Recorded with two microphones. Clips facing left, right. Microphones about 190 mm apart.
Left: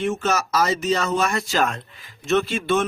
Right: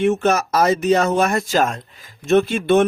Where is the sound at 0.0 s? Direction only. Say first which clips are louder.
Right 6 dB; 60° right (ahead or behind).